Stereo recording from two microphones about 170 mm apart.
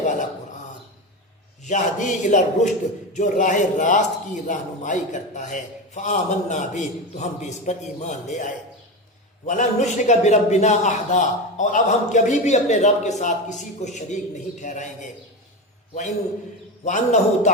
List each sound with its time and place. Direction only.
0.0 s a sound: 50° left (ahead or behind)
1.6 s a man's voice: 45° left (ahead or behind)
16.8 s a man's voice: 45° left (ahead or behind)